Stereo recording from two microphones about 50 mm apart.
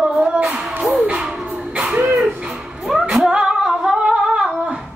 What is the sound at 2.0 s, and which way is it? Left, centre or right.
Music, right.